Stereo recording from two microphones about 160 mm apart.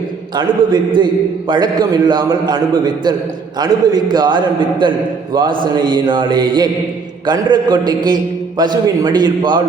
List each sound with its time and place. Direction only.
0.3 s a man's voice: 25° right (ahead or behind)